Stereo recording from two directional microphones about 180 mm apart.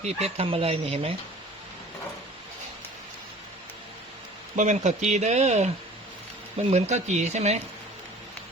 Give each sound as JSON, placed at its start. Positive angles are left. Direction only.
{"t": 0.0, "sound": "speech", "side_deg": -35}
{"t": 4.5, "sound": "speech", "side_deg": -40}